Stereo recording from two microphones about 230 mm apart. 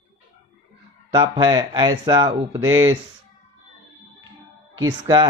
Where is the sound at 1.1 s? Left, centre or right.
Centre.